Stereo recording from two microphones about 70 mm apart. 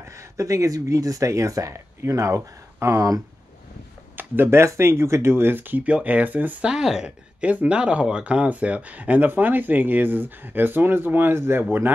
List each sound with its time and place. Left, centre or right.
0.0 s speech: right
4.2 s speech: right
6.7 s speech: centre; by 11.6 s right